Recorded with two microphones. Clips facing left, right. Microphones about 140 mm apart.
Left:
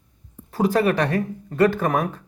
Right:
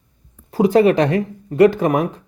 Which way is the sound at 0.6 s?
20° right (ahead or behind).